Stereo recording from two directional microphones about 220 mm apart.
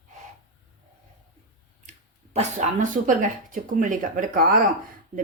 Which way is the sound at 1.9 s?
30° right (ahead or behind).